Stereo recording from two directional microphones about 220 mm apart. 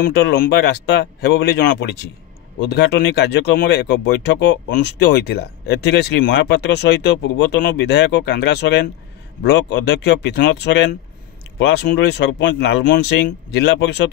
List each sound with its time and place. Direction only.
0.0 s speech: 45° left (ahead or behind)